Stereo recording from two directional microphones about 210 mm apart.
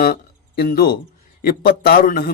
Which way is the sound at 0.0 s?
45° left (ahead or behind).